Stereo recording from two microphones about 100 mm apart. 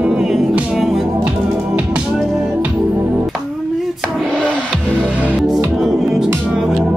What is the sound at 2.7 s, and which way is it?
Music, 25° right (ahead or behind).